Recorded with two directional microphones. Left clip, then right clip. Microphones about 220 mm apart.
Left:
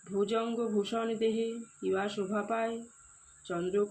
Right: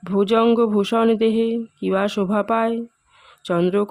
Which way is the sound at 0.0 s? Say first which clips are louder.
Right 14 dB; 50° right (ahead or behind).